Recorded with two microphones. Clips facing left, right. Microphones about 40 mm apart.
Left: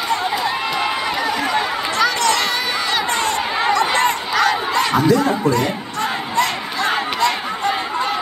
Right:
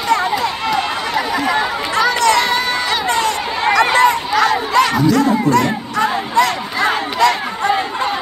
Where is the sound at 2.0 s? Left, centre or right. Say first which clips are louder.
Right 4 dB; centre.